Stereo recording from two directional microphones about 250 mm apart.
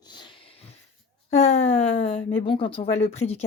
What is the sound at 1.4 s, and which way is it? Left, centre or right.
Speech, left.